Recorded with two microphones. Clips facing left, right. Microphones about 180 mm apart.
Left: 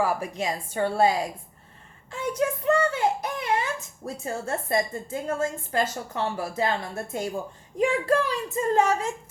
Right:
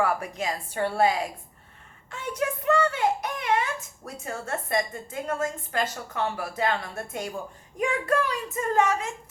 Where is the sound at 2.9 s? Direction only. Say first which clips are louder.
Left 1 dB; 30° left (ahead or behind).